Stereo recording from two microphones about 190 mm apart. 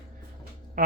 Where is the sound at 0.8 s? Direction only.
45° right (ahead or behind).